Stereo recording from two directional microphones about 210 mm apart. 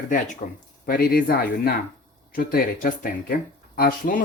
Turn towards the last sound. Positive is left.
turn(degrees=45)  # may be behind; listen again after turning